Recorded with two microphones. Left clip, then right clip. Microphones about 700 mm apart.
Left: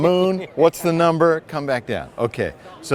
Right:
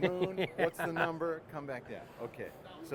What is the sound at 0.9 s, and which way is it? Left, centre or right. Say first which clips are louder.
Speech: left 18 dB; left.